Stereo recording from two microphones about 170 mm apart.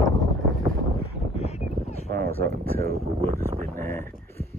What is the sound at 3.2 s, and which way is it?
Speech, 40° right (ahead or behind).